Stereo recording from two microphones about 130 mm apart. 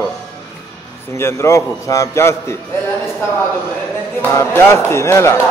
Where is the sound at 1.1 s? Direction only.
20° left (ahead or behind).